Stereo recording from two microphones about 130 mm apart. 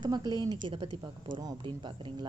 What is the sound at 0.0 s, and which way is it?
Speech, 35° right (ahead or behind).